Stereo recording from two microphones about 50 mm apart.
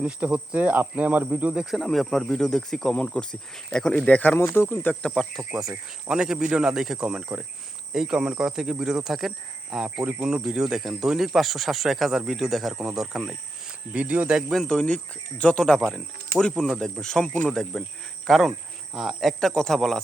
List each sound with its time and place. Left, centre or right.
0.0 s speech: right
0.6 s speech: right
1.7 s speech: centre
2.9 s speech: left
3.7 s speech: centre
4.0 s speech: left
4.4 s speech: left
4.7 s speech: left
5.1 s speech: centre
6.1 s speech: centre
13.2 s speech: right
14.5 s speech: centre